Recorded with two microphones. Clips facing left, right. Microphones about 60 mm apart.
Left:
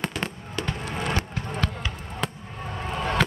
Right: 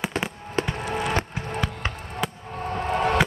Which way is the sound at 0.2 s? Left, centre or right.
Right.